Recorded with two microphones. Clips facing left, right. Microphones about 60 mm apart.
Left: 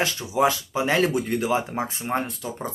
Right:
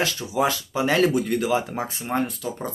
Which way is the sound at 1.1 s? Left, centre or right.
Left.